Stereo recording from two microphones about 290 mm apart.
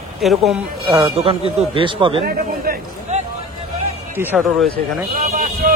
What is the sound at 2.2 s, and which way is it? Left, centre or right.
Speech, right.